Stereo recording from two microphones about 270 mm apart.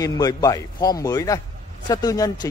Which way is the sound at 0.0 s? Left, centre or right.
Centre.